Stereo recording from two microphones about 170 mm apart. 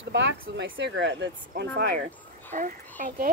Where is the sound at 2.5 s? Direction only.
50° right (ahead or behind).